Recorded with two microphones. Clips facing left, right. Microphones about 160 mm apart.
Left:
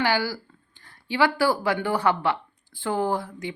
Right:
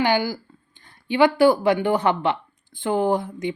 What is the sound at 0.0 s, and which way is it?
A woman's voice, 20° right (ahead or behind).